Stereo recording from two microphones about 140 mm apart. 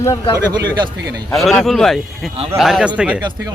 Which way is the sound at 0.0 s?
25° left (ahead or behind).